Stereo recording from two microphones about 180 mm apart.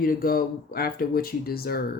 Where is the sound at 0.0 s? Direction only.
50° left (ahead or behind).